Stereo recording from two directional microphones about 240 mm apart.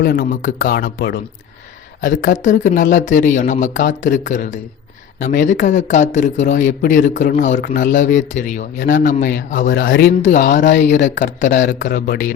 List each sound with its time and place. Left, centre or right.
0.0 s speech: left